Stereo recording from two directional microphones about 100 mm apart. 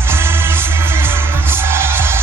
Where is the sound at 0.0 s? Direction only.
25° right (ahead or behind).